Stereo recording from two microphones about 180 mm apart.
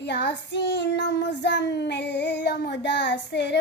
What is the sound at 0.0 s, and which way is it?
Child singing, 70° left (ahead or behind).